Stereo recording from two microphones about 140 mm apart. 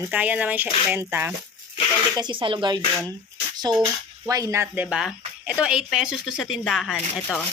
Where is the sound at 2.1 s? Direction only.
35° right (ahead or behind); by 7.0 s centre (ahead or behind).